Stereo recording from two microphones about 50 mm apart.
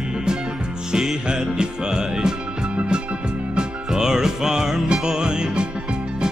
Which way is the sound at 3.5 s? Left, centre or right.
Centre.